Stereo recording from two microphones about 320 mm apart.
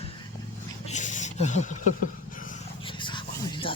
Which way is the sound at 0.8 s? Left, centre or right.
Left.